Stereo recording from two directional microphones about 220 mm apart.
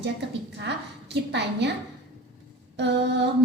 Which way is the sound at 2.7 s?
50° right (ahead or behind).